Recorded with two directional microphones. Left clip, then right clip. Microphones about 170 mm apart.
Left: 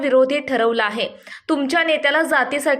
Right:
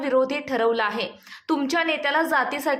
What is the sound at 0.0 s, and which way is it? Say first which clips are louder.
A woman's voice: left 6 dB; 20° left (ahead or behind).